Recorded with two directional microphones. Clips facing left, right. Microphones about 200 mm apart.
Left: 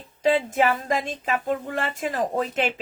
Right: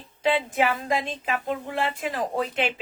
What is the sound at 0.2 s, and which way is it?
Speech, 40° left (ahead or behind).